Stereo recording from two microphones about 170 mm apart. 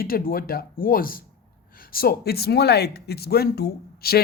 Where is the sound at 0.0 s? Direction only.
60° left (ahead or behind).